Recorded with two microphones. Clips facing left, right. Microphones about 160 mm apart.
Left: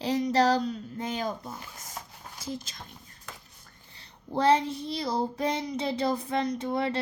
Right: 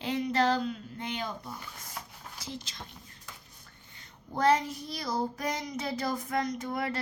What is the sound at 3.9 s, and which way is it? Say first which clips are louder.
A woman's voice: left 6 dB; 30° left (ahead or behind).